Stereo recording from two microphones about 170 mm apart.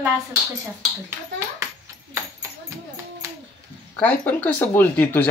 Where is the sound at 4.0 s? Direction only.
10° left (ahead or behind).